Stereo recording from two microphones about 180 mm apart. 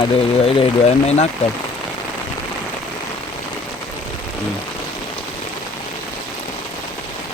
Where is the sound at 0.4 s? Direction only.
30° left (ahead or behind).